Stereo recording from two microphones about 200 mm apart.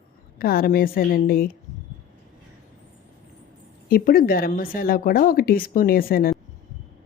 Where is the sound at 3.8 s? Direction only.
45° left (ahead or behind).